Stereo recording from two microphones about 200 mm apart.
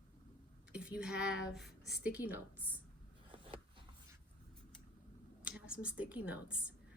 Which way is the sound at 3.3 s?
25° right (ahead or behind).